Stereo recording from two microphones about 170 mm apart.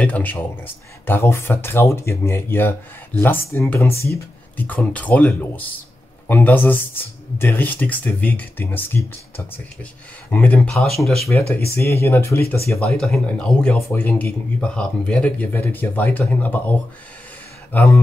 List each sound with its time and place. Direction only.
0.0 s speech: 10° left (ahead or behind)
11.7 s speech: 15° left (ahead or behind)
12.7 s speech: centre (ahead or behind)
17.7 s speech: 15° left (ahead or behind)